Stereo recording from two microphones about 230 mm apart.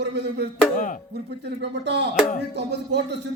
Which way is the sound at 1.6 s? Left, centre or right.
Right.